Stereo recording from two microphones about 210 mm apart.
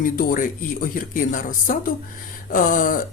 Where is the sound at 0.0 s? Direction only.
40° left (ahead or behind).